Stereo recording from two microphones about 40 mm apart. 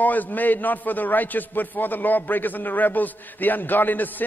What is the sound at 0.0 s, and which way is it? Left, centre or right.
A man's voice, left.